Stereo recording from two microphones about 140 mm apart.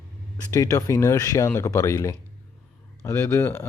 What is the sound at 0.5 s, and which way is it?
Speech, 25° left (ahead or behind).